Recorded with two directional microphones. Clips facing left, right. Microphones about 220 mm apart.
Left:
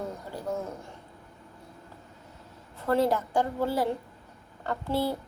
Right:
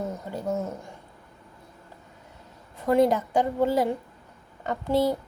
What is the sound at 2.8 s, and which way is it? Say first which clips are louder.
A woman's voice: right 4 dB; 15° right (ahead or behind).